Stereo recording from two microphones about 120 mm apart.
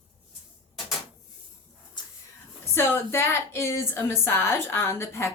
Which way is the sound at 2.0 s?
40° left (ahead or behind).